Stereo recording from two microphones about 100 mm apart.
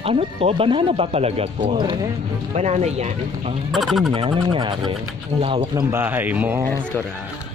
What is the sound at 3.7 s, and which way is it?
Speech, centre (ahead or behind).